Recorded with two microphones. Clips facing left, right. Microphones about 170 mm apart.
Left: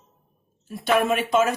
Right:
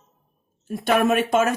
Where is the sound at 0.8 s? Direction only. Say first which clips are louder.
Right 2 dB; 50° right (ahead or behind).